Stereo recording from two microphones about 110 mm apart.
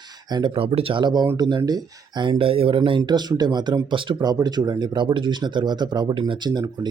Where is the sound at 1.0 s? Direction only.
35° right (ahead or behind).